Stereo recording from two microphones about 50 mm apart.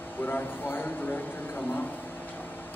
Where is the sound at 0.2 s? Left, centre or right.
Left.